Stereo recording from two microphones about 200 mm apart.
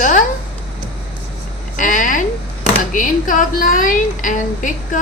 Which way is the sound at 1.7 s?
40° left (ahead or behind).